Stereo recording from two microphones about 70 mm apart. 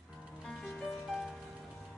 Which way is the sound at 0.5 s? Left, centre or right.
Centre.